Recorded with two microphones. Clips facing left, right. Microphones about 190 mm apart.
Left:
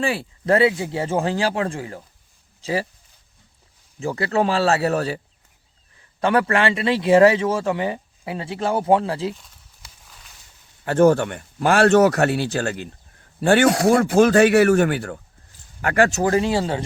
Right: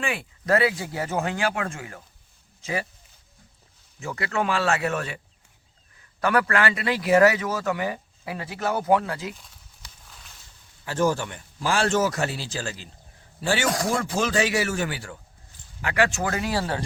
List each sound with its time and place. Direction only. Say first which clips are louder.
0.0 s speech: left 6 dB; 35° left (ahead or behind)
4.0 s a man's voice: left 6 dB; 35° left (ahead or behind)
9.3 s walk: left 5 dB; centre (ahead or behind)
10.8 s speech: left 8 dB; 60° left (ahead or behind); by 16.8 s 25° left (ahead or behind)